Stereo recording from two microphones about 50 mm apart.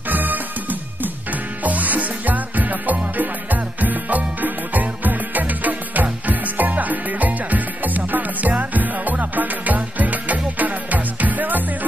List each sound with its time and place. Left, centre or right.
0.1 s music: right